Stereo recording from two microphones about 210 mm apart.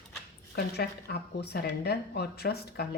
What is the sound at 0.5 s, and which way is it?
A woman's voice, 50° left (ahead or behind).